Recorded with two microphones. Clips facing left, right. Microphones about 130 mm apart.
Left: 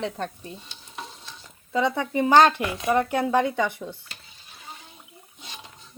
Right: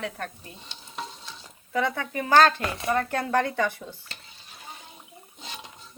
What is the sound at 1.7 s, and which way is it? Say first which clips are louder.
Speech: left 3 dB; 20° left (ahead or behind).